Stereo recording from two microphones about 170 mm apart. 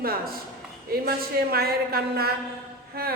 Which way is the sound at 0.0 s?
60° right (ahead or behind).